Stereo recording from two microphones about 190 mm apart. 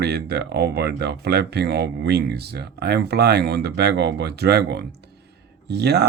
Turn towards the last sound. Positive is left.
turn(degrees=-60)  # may be behind; listen again after turning